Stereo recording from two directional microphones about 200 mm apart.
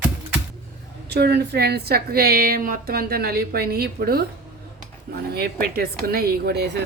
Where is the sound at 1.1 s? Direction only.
55° right (ahead or behind).